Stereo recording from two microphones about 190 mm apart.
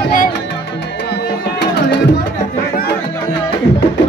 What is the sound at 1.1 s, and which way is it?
Music, 65° left (ahead or behind).